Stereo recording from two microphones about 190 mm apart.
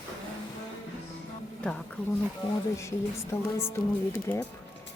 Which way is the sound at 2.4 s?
25° left (ahead or behind).